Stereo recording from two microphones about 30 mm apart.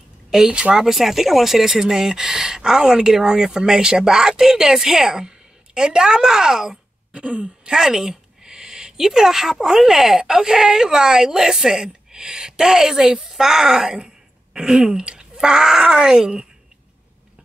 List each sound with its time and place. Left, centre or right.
0.5 s speech: right
0.7 s a woman's voice: centre
5.9 s speech: right
7.1 s throat clearing: right
7.7 s a woman's voice: centre